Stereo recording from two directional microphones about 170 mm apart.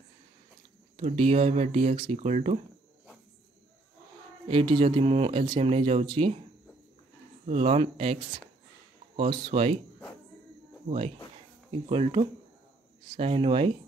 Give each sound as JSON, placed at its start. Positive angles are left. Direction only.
{"t": 0.9, "sound": "speech", "side_deg": -40}
{"t": 4.5, "sound": "speech", "side_deg": -30}
{"t": 7.4, "sound": "speech", "side_deg": -40}
{"t": 10.9, "sound": "speech", "side_deg": -35}